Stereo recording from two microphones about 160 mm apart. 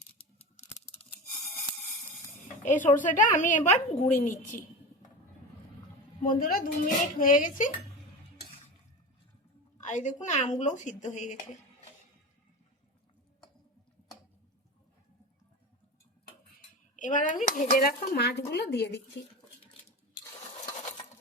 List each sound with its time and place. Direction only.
2.6 s speech: 50° left (ahead or behind)
6.2 s speech: 60° left (ahead or behind)
9.8 s speech: 50° left (ahead or behind)
16.9 s speech: 55° left (ahead or behind); by 19.2 s 90° left